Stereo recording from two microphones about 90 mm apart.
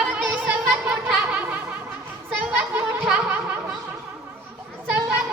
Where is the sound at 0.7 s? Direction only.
5° right (ahead or behind).